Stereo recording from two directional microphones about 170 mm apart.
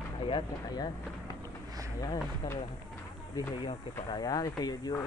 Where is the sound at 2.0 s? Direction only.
20° left (ahead or behind).